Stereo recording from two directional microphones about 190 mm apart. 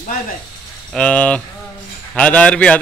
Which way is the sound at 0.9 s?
5° left (ahead or behind).